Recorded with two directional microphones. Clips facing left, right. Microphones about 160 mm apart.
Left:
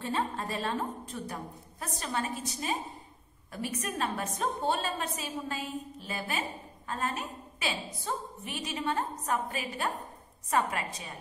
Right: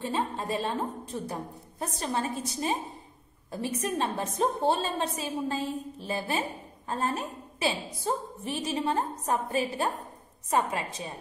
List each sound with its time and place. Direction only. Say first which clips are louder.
0.0 s a woman's voice: right 2 dB; 20° right (ahead or behind)